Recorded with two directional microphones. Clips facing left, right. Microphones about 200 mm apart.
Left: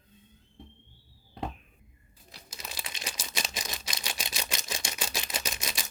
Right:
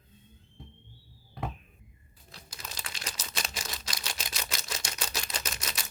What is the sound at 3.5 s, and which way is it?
Camera, 15° left (ahead or behind).